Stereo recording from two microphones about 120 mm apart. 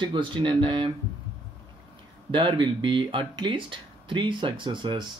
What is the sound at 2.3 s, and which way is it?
Speech, 40° right (ahead or behind).